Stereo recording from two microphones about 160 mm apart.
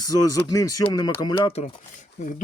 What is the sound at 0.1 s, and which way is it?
Speech, 20° left (ahead or behind).